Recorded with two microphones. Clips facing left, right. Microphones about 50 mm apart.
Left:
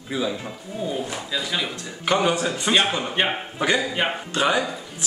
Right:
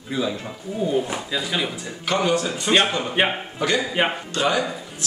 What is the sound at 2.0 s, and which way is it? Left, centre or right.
Speech, centre.